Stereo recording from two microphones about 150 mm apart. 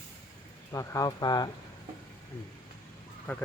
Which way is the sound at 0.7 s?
20° left (ahead or behind).